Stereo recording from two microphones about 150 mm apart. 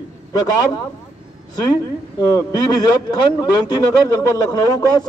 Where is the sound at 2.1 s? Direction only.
25° left (ahead or behind).